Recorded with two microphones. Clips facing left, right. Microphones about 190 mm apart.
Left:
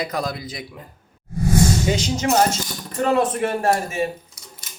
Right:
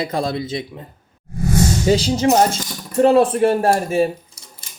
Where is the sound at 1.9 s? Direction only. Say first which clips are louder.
Right 5 dB; 35° right (ahead or behind).